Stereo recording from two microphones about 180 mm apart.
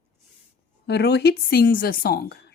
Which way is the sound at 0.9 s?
65° left (ahead or behind).